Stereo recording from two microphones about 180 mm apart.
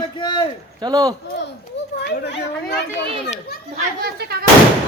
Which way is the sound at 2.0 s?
70° left (ahead or behind).